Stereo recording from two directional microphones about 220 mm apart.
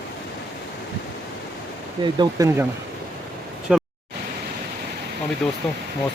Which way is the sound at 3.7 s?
5° right (ahead or behind).